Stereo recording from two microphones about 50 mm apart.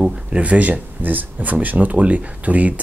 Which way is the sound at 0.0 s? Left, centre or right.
Right.